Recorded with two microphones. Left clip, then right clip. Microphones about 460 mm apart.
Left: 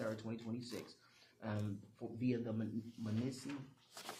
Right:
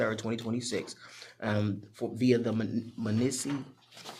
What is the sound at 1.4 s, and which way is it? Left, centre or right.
Speech, right.